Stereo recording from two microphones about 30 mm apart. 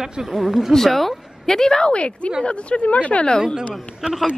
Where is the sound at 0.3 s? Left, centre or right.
Centre.